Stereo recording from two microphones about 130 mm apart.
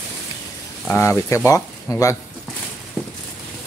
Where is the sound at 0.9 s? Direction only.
20° left (ahead or behind).